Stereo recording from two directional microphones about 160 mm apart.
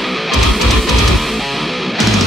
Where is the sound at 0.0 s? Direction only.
Centre (ahead or behind).